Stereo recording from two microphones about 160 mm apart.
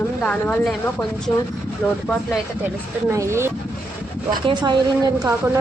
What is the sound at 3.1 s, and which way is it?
Speech, 15° right (ahead or behind).